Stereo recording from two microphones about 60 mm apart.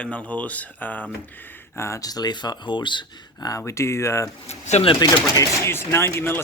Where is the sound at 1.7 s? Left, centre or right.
Left.